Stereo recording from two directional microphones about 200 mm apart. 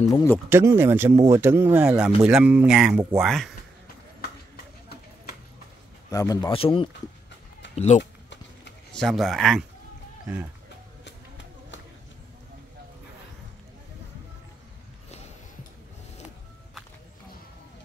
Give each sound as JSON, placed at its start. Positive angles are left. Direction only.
{"t": 0.1, "sound": "speech", "side_deg": 15}
{"t": 0.5, "sound": "speech", "side_deg": -10}
{"t": 6.0, "sound": "speech", "side_deg": 15}
{"t": 8.0, "sound": "a sound", "side_deg": 60}
{"t": 8.9, "sound": "speech", "side_deg": 0}